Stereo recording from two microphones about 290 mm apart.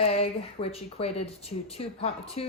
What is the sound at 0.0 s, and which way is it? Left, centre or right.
Speech, centre.